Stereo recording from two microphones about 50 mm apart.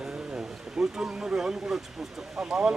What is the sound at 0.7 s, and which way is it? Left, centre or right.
Speech, centre.